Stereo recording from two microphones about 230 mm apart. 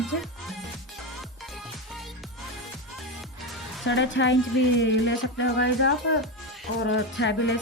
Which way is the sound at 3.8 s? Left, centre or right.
Left.